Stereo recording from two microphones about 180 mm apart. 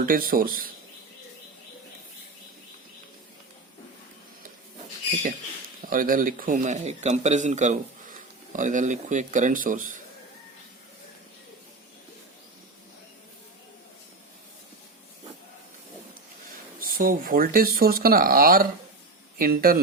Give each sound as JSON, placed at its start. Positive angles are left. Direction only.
{"t": 0.0, "sound": "speech", "side_deg": -50}
{"t": 5.9, "sound": "speech", "side_deg": -50}
{"t": 16.8, "sound": "speech", "side_deg": -50}